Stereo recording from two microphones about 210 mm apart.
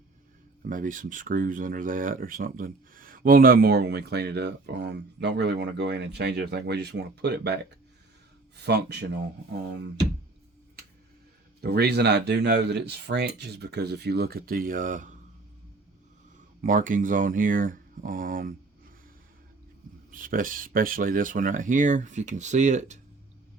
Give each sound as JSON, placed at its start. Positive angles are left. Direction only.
{"t": 0.6, "sound": "speech", "side_deg": -40}
{"t": 8.6, "sound": "speech", "side_deg": -50}
{"t": 11.6, "sound": "speech", "side_deg": -50}
{"t": 16.6, "sound": "speech", "side_deg": -40}
{"t": 20.1, "sound": "speech", "side_deg": -40}